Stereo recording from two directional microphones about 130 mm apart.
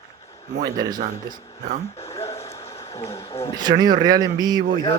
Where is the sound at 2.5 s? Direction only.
25° left (ahead or behind).